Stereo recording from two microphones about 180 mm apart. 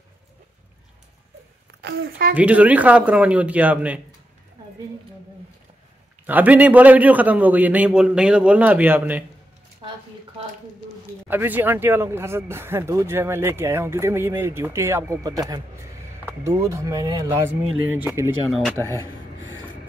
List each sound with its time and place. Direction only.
1.8 s a woman's voice: 65° right (ahead or behind)
2.3 s speech: 10° right (ahead or behind)
6.2 s speech: 10° right (ahead or behind)
11.2 s speech: 10° right (ahead or behind)
16.4 s speech: 15° right (ahead or behind)